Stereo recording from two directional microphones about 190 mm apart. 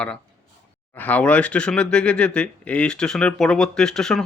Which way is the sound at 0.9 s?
10° left (ahead or behind).